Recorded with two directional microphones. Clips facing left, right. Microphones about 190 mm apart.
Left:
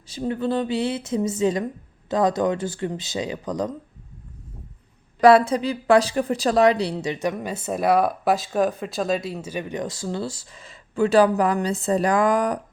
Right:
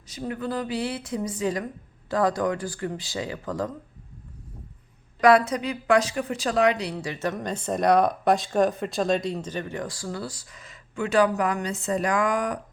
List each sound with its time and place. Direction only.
0.1 s a woman's voice: 30° left (ahead or behind)
5.2 s a woman's voice: 30° left (ahead or behind)